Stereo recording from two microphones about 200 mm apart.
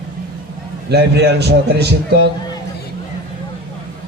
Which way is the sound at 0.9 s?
55° right (ahead or behind).